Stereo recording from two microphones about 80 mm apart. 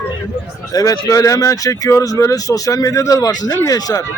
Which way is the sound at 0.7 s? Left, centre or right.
Left.